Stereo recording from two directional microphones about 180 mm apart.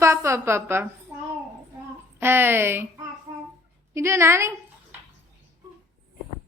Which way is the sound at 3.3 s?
25° right (ahead or behind).